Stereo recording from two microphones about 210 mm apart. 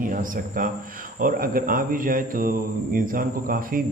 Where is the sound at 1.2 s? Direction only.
40° right (ahead or behind).